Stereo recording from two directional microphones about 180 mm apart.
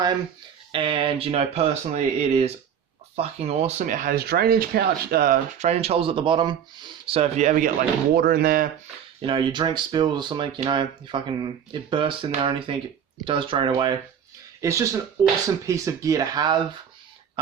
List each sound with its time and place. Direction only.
0.7 s speech: 30° right (ahead or behind); by 5.4 s 55° right (ahead or behind)
5.5 s speech: 35° right (ahead or behind)
8.1 s speech: 55° right (ahead or behind)
9.2 s speech: 25° right (ahead or behind)